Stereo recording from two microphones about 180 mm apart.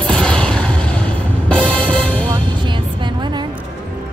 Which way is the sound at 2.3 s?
25° right (ahead or behind).